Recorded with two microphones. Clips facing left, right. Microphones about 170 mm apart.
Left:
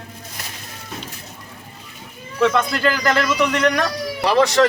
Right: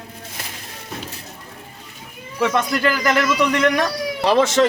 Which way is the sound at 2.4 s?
10° right (ahead or behind).